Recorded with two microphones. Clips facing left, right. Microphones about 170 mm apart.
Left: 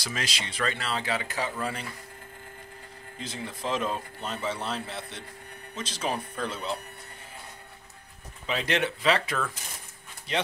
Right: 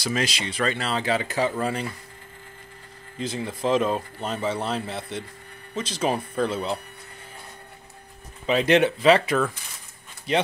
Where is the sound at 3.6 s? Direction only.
25° right (ahead or behind).